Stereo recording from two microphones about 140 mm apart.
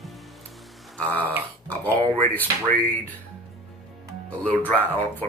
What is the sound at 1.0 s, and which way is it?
Speech, 10° left (ahead or behind).